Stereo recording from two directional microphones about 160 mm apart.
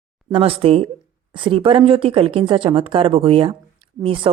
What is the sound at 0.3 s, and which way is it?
Speech, 35° right (ahead or behind).